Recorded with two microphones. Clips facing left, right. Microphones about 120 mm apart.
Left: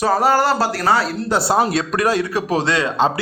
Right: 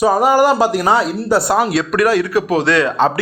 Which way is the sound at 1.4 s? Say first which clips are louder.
Even; 30° left (ahead or behind).